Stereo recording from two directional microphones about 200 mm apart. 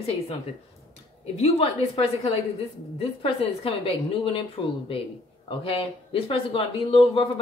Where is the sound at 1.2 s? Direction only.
30° left (ahead or behind).